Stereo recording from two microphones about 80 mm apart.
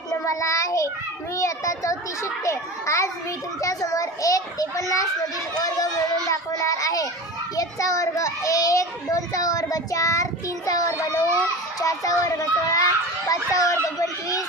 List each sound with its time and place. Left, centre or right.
0.1 s child singing: left
1.4 s a child's voice: left